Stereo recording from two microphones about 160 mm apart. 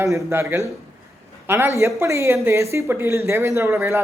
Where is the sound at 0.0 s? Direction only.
15° right (ahead or behind).